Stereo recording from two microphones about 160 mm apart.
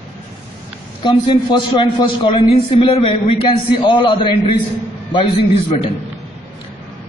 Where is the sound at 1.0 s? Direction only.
30° left (ahead or behind).